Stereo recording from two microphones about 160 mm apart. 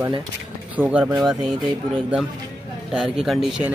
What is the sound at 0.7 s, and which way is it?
Speech, 10° right (ahead or behind).